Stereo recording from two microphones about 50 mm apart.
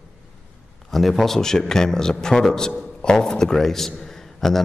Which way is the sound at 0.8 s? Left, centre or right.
Centre.